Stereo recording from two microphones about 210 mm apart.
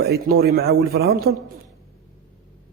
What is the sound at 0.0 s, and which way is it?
Speech, 50° right (ahead or behind).